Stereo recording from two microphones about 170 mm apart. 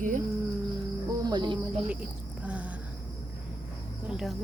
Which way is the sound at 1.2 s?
25° right (ahead or behind).